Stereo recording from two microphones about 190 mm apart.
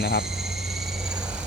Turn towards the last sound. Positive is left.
turn(degrees=55)  # may be behind; listen again after turning